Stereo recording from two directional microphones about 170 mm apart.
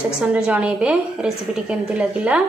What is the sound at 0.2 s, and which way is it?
A woman's voice, 5° right (ahead or behind).